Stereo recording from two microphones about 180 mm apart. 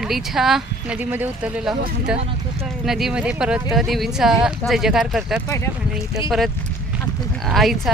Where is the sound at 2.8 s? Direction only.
Centre (ahead or behind).